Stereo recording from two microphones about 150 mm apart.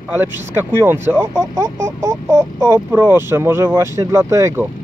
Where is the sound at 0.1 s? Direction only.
15° right (ahead or behind).